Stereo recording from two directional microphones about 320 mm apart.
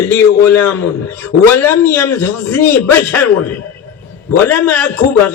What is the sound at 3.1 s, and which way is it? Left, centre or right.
Speech, left.